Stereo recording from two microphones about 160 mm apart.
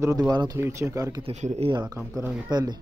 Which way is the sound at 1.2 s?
45° right (ahead or behind).